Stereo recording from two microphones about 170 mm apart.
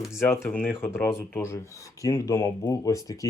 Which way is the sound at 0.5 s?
10° left (ahead or behind).